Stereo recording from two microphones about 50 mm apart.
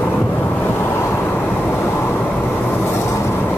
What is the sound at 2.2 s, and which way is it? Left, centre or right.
Vehicle, left.